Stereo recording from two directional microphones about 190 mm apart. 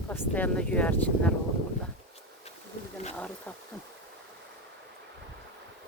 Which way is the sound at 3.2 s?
5° left (ahead or behind).